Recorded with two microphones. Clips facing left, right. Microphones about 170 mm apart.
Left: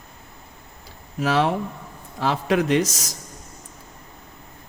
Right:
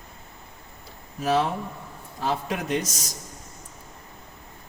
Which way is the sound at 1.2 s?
90° left.